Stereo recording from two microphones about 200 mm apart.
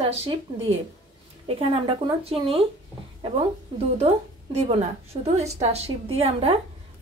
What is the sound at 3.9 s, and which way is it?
A woman's voice, 30° right (ahead or behind).